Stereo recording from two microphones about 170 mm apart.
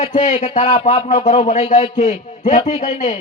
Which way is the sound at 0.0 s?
45° left (ahead or behind).